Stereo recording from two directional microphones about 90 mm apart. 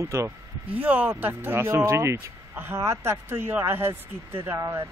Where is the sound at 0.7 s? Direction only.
15° right (ahead or behind).